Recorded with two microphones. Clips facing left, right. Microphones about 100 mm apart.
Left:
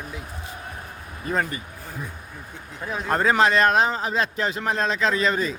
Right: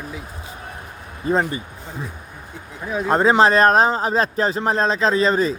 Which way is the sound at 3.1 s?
25° right (ahead or behind).